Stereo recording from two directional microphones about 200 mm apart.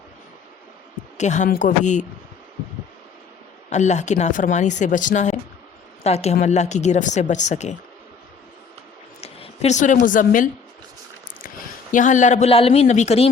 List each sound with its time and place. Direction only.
1.2 s speech: 35° left (ahead or behind)
3.7 s a woman's voice: 35° left (ahead or behind)
9.2 s a man's voice: 30° left (ahead or behind)